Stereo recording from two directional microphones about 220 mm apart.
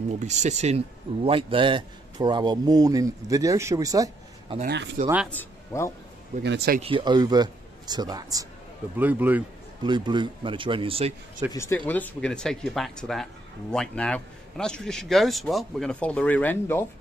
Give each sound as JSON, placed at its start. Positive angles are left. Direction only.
{"t": 0.2, "sound": "a man's voice", "side_deg": -30}
{"t": 5.3, "sound": "speech", "side_deg": 10}
{"t": 6.4, "sound": "speech", "side_deg": -50}
{"t": 6.8, "sound": "a man's voice", "side_deg": -25}
{"t": 9.8, "sound": "speech", "side_deg": -20}
{"t": 11.5, "sound": "speech", "side_deg": 10}